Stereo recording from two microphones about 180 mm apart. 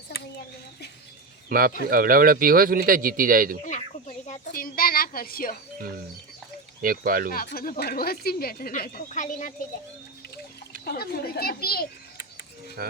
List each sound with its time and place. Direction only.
1.5 s a man's voice: 55° right (ahead or behind)
3.7 s a sound: 40° left (ahead or behind)
6.8 s a man's voice: 55° right (ahead or behind)
7.3 s speech: 55° left (ahead or behind)
10.8 s speech: 60° left (ahead or behind)
12.8 s speech: 55° right (ahead or behind)